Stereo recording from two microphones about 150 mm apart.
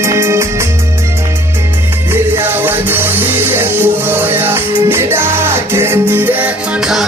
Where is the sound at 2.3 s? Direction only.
15° right (ahead or behind).